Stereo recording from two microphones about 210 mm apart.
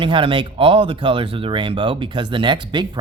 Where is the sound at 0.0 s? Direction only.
25° right (ahead or behind).